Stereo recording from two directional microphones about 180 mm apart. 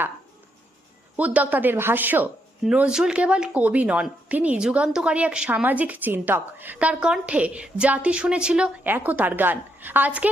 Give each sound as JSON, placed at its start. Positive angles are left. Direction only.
{"t": 1.1, "sound": "a woman's voice", "side_deg": -10}